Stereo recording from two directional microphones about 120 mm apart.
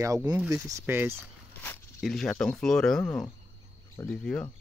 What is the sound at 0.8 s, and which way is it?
Speech, 15° right (ahead or behind).